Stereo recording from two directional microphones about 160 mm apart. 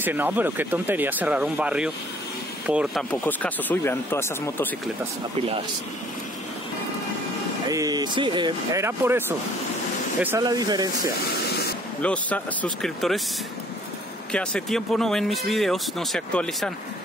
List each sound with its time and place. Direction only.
0.0 s speech: 10° right (ahead or behind)
3.1 s speech: 10° left (ahead or behind)
7.6 s speech: 25° right (ahead or behind)
8.8 s speech: 15° right (ahead or behind)
10.4 s speech: 25° right (ahead or behind)
12.0 s speech: 5° left (ahead or behind)
14.3 s speech: 5° left (ahead or behind)